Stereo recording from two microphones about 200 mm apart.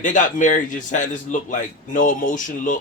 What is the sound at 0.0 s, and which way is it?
A man's voice, 40° left (ahead or behind).